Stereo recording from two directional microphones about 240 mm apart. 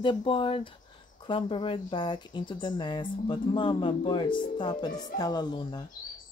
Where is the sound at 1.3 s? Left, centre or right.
Left.